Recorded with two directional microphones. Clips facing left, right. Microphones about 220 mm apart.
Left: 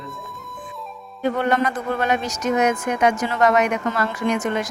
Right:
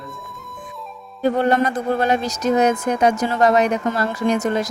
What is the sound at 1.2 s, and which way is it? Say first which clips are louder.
A woman's voice: right 3 dB; 35° right (ahead or behind).